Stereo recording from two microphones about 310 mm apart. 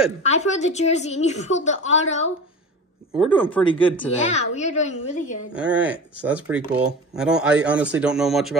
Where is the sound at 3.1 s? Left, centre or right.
Centre.